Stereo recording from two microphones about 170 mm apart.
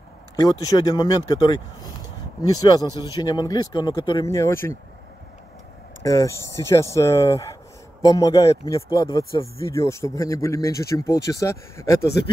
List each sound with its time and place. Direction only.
0.4 s speech: 20° left (ahead or behind)
4.3 s speech: 15° left (ahead or behind)
6.0 s speech: 20° left (ahead or behind)